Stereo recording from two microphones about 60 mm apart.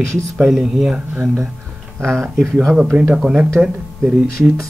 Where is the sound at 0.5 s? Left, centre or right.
Centre.